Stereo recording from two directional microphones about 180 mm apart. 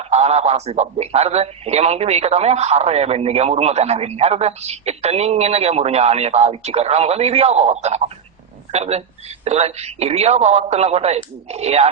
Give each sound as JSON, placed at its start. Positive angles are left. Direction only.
{"t": 0.1, "sound": "a man's voice", "side_deg": -40}